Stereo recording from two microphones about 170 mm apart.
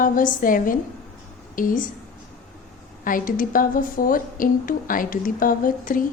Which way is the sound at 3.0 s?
55° left (ahead or behind).